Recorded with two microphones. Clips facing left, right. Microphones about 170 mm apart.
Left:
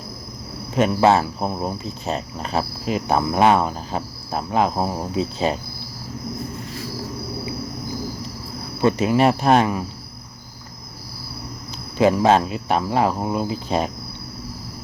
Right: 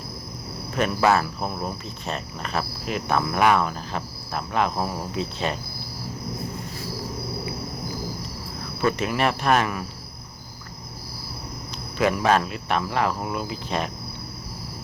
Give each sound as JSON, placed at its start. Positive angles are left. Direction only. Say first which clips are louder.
{"t": 0.8, "sound": "speech", "louder": "left 4 dB", "side_deg": 25}
{"t": 8.8, "sound": "speech", "louder": "left 6 dB", "side_deg": 25}
{"t": 11.9, "sound": "speech", "louder": "left 5 dB", "side_deg": 25}